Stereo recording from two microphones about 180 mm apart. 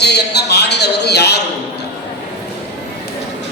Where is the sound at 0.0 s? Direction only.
65° left (ahead or behind).